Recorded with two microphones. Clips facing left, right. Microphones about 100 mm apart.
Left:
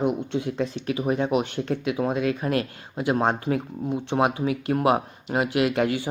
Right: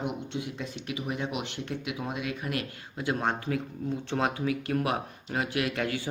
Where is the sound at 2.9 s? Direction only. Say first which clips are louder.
Left 7 dB; 25° left (ahead or behind).